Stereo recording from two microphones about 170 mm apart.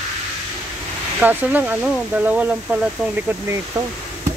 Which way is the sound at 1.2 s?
10° right (ahead or behind).